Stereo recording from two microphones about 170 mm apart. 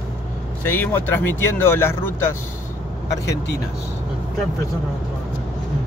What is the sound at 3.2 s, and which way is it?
Speech, 75° left (ahead or behind).